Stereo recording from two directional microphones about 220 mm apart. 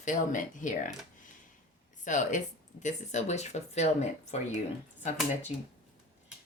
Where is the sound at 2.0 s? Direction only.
35° left (ahead or behind).